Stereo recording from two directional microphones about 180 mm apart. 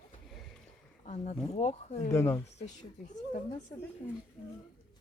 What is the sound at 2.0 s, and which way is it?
Speech, 15° left (ahead or behind).